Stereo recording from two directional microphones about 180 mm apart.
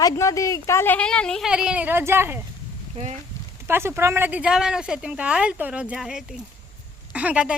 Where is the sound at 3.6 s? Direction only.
15° right (ahead or behind).